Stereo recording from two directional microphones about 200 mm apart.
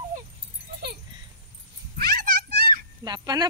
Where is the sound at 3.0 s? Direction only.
20° right (ahead or behind).